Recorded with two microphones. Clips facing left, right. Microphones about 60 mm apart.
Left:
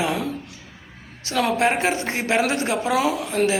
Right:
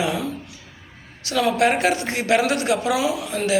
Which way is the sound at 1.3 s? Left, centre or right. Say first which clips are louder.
Right 1 dB; left.